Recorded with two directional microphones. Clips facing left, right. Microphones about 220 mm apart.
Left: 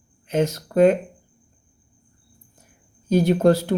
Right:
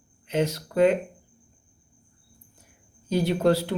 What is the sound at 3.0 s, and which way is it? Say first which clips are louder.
Speech: left 5 dB; 45° left (ahead or behind).